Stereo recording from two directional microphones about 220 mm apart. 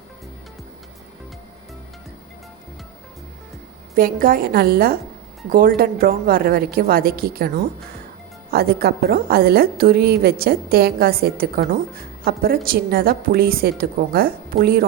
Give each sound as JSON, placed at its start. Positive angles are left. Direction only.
{"t": 3.9, "sound": "a woman's voice", "side_deg": -40}